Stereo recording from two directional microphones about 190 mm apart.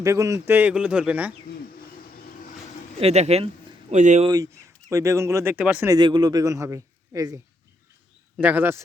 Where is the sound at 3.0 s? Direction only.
35° right (ahead or behind).